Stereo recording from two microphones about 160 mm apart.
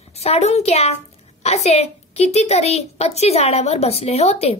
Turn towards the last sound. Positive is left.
turn(degrees=40)  # may be behind; listen again after turning